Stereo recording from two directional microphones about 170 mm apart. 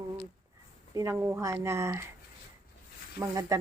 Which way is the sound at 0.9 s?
15° right (ahead or behind).